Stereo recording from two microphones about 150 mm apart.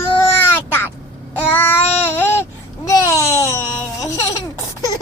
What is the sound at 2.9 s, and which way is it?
Babbling, 20° left (ahead or behind).